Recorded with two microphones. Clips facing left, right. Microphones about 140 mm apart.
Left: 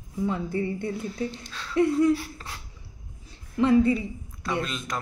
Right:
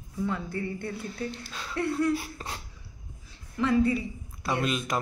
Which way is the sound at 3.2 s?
25° left (ahead or behind).